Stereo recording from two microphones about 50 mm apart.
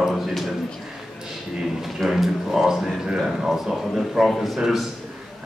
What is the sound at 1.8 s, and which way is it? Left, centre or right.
Speech, centre.